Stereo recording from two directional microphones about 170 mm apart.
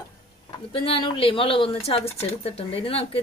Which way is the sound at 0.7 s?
35° left (ahead or behind).